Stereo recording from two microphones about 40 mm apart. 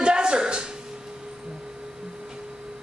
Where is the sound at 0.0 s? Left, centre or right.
Right.